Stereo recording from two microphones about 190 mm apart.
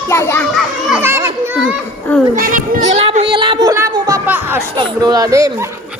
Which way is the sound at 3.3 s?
25° right (ahead or behind).